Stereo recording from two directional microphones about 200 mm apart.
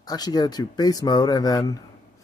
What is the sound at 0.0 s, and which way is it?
Speech, 20° left (ahead or behind).